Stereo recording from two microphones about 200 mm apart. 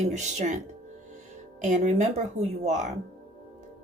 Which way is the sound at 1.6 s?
35° right (ahead or behind).